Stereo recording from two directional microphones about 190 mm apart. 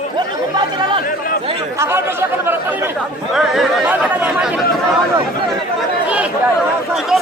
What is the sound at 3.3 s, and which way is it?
Chatter, centre (ahead or behind).